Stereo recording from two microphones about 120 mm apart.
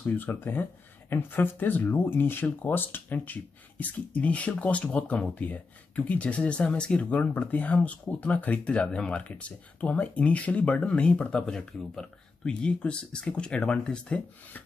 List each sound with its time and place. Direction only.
0.0 s speech: 15° left (ahead or behind)